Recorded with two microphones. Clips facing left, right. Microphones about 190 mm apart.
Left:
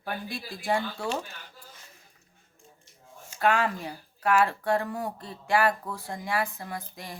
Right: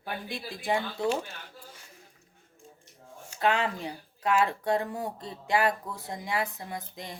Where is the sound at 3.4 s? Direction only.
20° right (ahead or behind).